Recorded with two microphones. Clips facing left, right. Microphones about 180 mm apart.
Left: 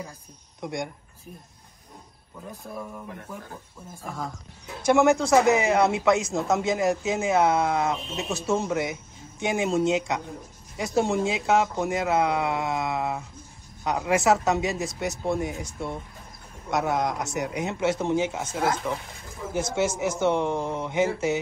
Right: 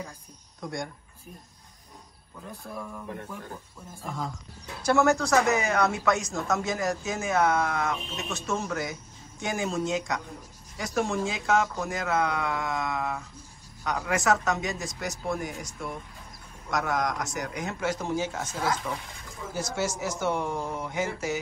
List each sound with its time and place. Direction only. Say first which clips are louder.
0.6 s speech: left 3 dB; 20° left (ahead or behind)
2.7 s speech: even; 15° left (ahead or behind)
4.0 s speech: even; centre (ahead or behind)
4.8 s speech: left 3 dB; 15° left (ahead or behind)